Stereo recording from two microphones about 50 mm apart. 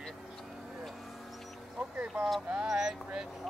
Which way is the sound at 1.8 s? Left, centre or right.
Centre.